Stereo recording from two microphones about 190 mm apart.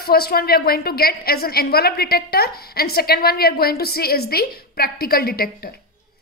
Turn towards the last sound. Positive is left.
turn(degrees=55)  # may be behind; listen again after turning